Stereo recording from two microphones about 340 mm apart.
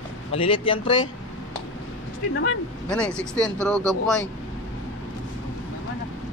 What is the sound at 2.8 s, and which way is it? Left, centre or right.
Speech, centre.